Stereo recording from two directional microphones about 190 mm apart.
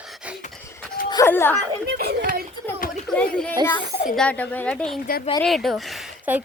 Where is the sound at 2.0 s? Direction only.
55° right (ahead or behind).